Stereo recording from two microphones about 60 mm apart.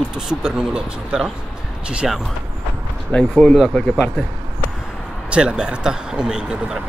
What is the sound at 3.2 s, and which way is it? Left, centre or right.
Speech, centre.